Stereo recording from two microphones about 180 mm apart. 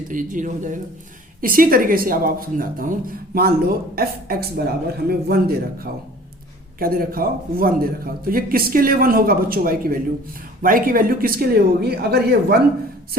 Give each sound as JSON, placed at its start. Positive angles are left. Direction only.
{"t": 0.1, "sound": "a man's voice", "side_deg": -45}